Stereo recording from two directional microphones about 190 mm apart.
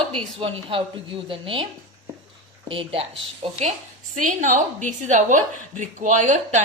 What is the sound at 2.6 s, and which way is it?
A woman's voice, 30° right (ahead or behind).